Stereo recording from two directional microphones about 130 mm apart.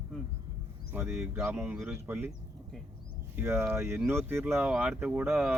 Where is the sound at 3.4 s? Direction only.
20° right (ahead or behind).